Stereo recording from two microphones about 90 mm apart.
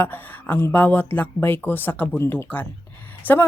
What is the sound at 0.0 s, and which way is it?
A woman's voice, 20° left (ahead or behind).